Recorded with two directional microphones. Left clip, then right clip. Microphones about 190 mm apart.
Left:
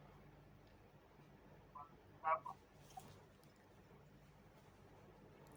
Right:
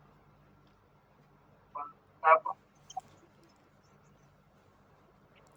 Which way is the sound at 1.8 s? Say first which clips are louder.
Right 16 dB; 50° right (ahead or behind).